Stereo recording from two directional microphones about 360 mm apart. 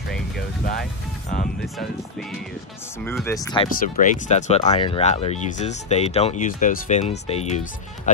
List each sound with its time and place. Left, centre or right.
3.0 s speech: centre
3.8 s speech: left